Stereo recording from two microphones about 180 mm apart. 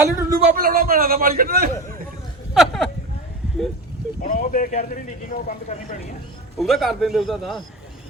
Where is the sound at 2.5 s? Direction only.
Centre (ahead or behind).